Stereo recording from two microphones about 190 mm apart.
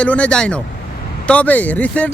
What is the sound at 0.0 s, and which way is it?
Speech, 5° left (ahead or behind).